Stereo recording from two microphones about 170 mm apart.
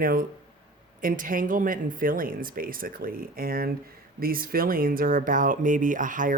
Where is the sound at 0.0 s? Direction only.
55° right (ahead or behind).